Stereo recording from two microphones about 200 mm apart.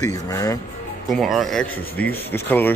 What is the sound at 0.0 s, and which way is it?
Speech, 15° left (ahead or behind).